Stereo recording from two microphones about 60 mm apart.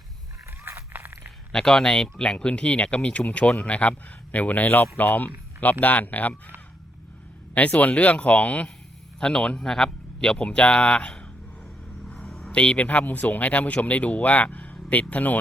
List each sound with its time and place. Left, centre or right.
0.6 s a sound: right
1.5 s speech: centre; by 6.3 s left
7.5 s speech: left
12.0 s vehicle: centre
12.5 s speech: centre